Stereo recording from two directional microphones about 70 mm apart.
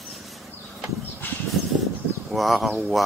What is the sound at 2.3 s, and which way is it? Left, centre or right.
Speech, centre.